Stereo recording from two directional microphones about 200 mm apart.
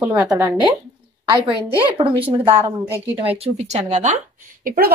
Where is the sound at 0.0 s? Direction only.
10° right (ahead or behind).